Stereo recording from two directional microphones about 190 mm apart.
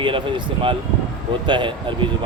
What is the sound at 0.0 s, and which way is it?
A man's voice, 25° right (ahead or behind).